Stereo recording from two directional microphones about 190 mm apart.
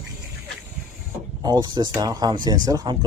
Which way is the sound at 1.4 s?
20° right (ahead or behind).